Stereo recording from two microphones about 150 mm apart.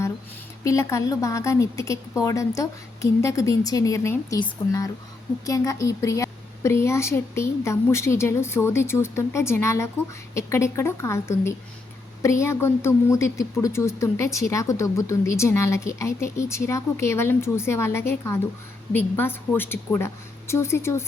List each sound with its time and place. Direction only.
0.6 s a woman's voice: 20° left (ahead or behind)